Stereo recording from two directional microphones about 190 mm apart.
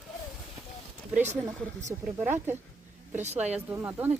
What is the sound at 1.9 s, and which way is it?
Speech, 15° right (ahead or behind).